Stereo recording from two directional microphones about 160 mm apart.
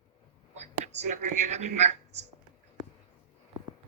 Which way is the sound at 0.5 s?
45° right (ahead or behind).